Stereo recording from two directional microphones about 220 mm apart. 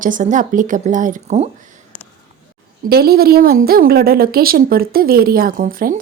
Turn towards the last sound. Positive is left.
turn(degrees=-40)  # may be behind; listen again after turning